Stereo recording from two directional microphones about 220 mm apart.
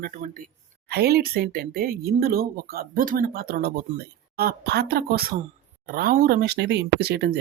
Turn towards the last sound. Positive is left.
turn(degrees=-50)  # may be behind; listen again after turning